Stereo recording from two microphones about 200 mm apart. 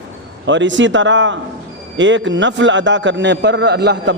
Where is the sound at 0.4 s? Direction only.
65° right (ahead or behind).